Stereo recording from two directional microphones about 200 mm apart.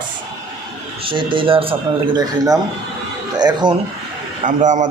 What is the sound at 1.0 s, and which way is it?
Speech, 25° right (ahead or behind).